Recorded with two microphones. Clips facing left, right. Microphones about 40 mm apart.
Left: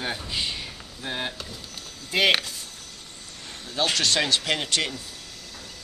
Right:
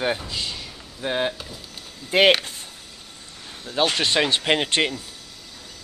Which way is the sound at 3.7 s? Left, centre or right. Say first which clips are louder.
Right 3 dB; right.